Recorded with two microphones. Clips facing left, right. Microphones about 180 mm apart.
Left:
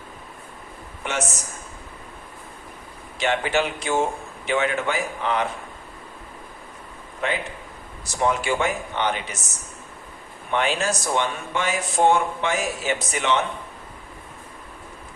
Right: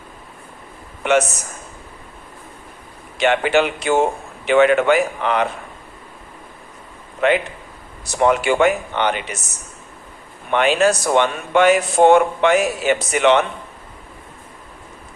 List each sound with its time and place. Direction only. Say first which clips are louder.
1.0 s a man's voice: right 12 dB; 75° right (ahead or behind)
3.2 s speech: right 6 dB; 70° right (ahead or behind)
7.2 s speech: right 9 dB; 65° right (ahead or behind)
10.5 s speech: right 8 dB; 70° right (ahead or behind)